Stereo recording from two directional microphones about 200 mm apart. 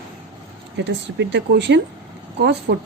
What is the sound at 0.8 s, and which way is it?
Speech, 60° right (ahead or behind).